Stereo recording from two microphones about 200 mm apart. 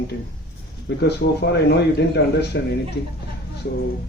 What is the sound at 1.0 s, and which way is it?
A man's voice, 55° left (ahead or behind).